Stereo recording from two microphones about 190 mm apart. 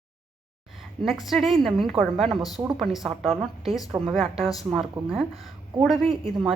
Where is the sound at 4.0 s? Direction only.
Centre (ahead or behind).